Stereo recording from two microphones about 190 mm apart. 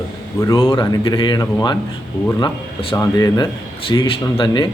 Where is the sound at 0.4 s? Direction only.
20° left (ahead or behind).